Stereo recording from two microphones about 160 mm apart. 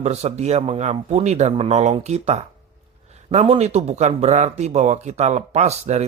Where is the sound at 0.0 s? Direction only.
45° right (ahead or behind).